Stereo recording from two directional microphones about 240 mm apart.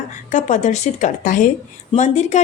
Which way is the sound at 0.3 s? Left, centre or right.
Left.